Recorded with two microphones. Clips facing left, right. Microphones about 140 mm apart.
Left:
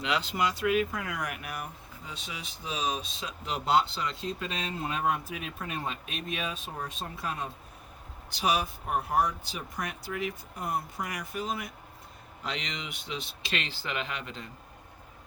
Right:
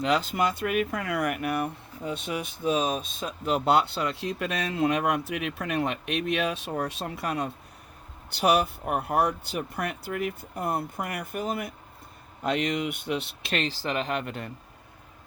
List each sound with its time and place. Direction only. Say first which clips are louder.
0.0 s speech: right 5 dB; 45° right (ahead or behind); by 7.5 s 70° right (ahead or behind)
8.3 s speech: right 6 dB; 60° right (ahead or behind)
13.6 s speech: right 8 dB; 40° right (ahead or behind); by 14.5 s 55° right (ahead or behind)